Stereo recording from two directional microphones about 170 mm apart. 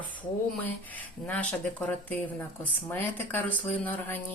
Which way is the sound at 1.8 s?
10° left (ahead or behind).